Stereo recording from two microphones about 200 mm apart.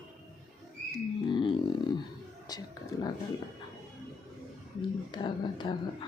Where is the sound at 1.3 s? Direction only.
25° left (ahead or behind).